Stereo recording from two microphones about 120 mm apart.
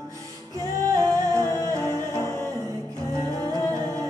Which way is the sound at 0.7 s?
30° right (ahead or behind).